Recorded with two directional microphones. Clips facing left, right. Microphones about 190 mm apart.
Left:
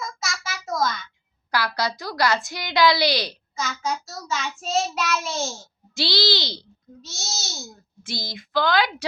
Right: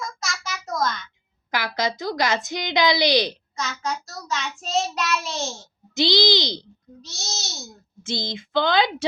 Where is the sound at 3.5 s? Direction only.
Centre (ahead or behind).